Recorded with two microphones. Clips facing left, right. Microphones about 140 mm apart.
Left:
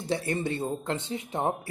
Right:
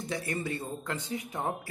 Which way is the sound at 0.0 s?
30° left (ahead or behind).